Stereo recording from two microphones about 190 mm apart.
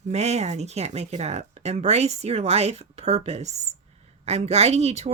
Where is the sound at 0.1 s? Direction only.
35° right (ahead or behind).